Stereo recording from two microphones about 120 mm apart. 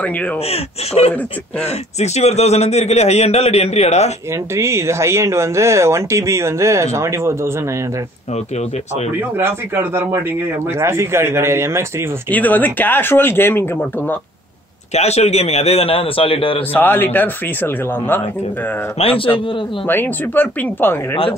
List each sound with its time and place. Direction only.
0.5 s a man's voice: 65° left (ahead or behind)
4.6 s speech: 25° right (ahead or behind)
9.4 s speech: 20° right (ahead or behind)
12.3 s speech: 15° left (ahead or behind)
15.0 s a man's voice: 65° left (ahead or behind)
16.7 s speech: 15° left (ahead or behind)
18.9 s speech: 50° left (ahead or behind)
19.9 s speech: 15° left (ahead or behind)